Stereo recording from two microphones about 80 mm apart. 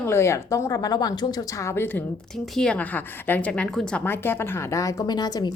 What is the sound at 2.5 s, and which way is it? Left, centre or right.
Speech, centre.